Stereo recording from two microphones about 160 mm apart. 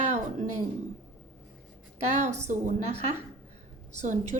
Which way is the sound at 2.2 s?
45° right (ahead or behind).